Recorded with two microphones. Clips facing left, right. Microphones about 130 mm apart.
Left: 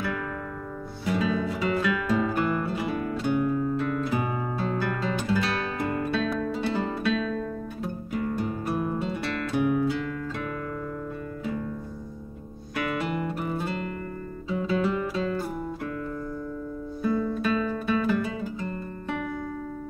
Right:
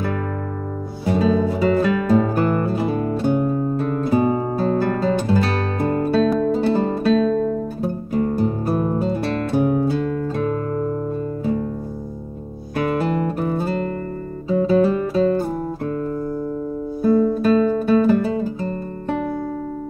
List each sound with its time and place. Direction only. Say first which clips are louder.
1.0 s music: right 8 dB; 35° right (ahead or behind)
12.7 s music: right 8 dB; 35° right (ahead or behind)
17.0 s music: right 10 dB; 40° right (ahead or behind)